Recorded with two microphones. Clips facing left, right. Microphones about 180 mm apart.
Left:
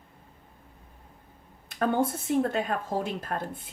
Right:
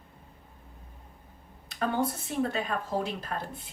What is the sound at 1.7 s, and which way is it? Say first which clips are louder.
A woman's voice: left 3 dB; 50° left (ahead or behind).